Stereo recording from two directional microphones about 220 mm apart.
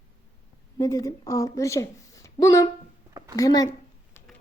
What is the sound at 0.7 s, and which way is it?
A woman's voice, 15° left (ahead or behind).